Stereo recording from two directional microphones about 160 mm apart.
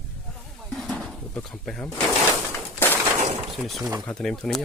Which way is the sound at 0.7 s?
5° left (ahead or behind).